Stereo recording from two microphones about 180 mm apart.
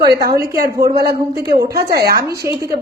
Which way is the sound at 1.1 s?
60° right (ahead or behind).